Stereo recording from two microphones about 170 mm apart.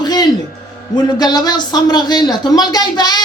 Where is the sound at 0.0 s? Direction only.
25° left (ahead or behind).